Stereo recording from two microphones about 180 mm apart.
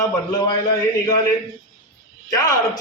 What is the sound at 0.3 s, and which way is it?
Speech, 25° left (ahead or behind).